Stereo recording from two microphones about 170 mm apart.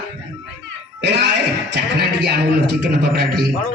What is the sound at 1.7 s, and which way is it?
Speech, 75° right (ahead or behind).